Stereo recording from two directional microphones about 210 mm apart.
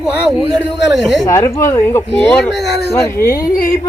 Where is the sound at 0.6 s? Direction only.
Centre (ahead or behind).